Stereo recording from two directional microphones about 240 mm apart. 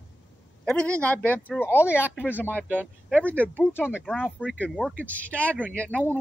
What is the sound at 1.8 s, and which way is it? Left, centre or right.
Speech, centre.